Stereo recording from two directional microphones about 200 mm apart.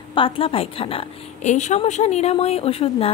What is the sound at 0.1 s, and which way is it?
A woman's voice, 25° left (ahead or behind).